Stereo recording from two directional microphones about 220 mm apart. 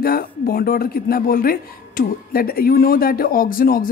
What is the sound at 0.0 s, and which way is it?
Speech, 40° left (ahead or behind).